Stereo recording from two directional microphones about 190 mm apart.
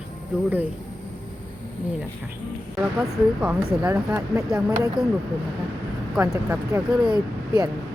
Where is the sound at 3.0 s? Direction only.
5° right (ahead or behind).